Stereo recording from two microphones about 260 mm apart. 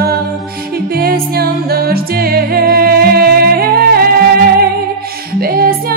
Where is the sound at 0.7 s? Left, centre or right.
Right.